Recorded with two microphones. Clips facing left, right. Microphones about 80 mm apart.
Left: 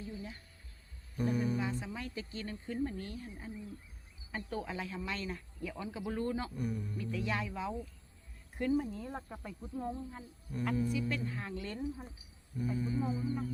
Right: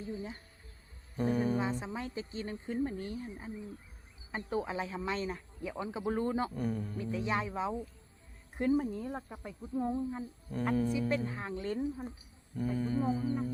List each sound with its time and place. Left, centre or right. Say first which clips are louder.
0.0 s speech: right 4 dB; right
8.9 s speech: right 3 dB; centre; by 11.8 s right
12.5 s speech: right 3 dB; right